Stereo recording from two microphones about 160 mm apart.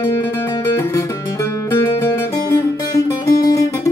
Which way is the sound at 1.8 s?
20° left (ahead or behind).